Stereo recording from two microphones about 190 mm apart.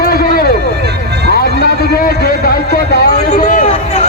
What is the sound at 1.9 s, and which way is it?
A man's voice, 55° left (ahead or behind).